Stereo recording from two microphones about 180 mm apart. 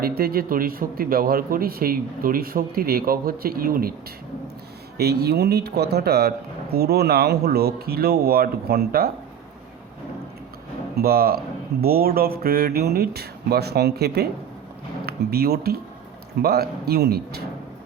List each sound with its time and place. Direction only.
0.0 s speech: 55° right (ahead or behind)
4.9 s speech: 65° right (ahead or behind)
10.9 s speech: 60° right (ahead or behind)